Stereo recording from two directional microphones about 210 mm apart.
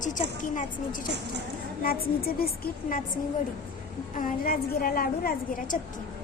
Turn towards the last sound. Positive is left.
turn(degrees=45)  # may be behind; listen again after turning